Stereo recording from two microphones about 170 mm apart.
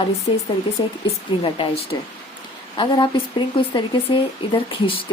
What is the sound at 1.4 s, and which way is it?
Speech, 30° left (ahead or behind).